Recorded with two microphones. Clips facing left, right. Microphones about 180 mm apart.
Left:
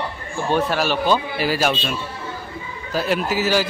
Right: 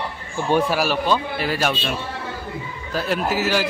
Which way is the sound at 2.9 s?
Centre (ahead or behind).